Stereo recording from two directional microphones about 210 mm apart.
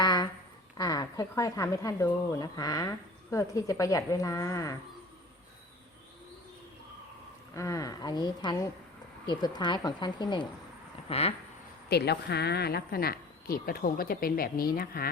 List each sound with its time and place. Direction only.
0.0 s a sound: 20° left (ahead or behind)
0.8 s speech: 15° left (ahead or behind)
7.5 s speech: 15° left (ahead or behind)
11.9 s speech: 50° left (ahead or behind)